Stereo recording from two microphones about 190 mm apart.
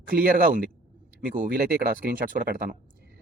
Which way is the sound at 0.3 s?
45° right (ahead or behind).